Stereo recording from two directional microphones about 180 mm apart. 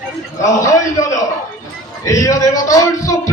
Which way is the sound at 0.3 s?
15° left (ahead or behind).